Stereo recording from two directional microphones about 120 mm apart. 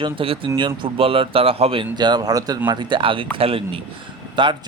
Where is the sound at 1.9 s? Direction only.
35° right (ahead or behind).